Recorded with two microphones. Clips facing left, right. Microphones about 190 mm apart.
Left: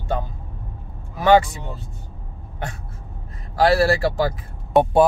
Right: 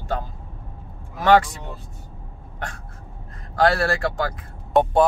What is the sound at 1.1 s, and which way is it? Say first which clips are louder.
Speech: left 1 dB; 5° left (ahead or behind).